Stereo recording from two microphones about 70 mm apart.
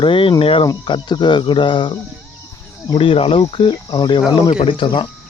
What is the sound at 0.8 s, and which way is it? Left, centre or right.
Speech, left.